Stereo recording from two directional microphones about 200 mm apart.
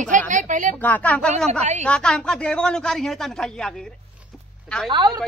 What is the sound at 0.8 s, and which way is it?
Speech, 10° left (ahead or behind).